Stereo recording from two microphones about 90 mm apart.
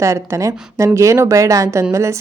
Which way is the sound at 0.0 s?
35° right (ahead or behind).